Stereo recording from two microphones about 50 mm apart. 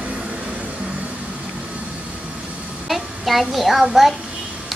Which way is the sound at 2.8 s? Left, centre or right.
Centre.